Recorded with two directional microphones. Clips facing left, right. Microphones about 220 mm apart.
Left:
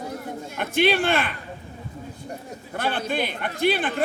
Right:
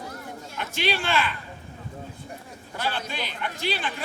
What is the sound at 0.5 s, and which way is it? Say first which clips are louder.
Speech: left 7 dB; 55° left (ahead or behind).